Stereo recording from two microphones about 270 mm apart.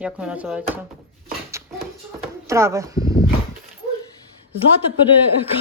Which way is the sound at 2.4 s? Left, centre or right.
Centre.